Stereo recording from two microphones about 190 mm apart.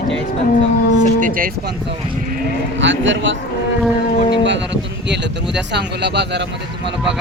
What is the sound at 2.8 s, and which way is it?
Speech, 75° right (ahead or behind).